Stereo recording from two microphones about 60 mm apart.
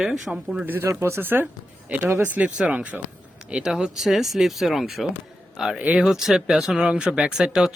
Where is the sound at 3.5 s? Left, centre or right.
Centre.